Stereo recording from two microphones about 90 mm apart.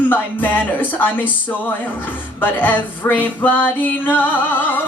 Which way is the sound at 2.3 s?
20° left (ahead or behind).